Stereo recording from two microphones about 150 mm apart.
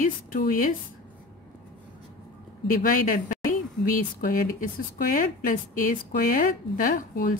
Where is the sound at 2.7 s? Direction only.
70° left (ahead or behind).